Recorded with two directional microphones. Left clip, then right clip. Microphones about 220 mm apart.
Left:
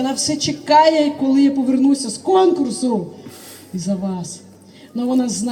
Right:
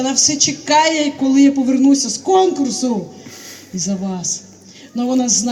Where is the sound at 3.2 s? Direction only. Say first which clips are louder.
Right 3 dB; 5° left (ahead or behind).